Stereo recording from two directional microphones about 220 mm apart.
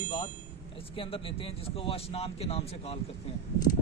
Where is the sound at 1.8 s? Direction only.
25° left (ahead or behind).